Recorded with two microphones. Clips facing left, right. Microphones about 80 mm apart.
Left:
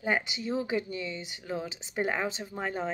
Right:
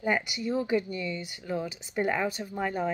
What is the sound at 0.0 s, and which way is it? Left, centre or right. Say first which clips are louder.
Speech: right 2 dB; left.